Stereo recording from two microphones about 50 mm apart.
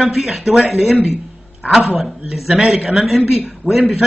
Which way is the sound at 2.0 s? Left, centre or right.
Centre.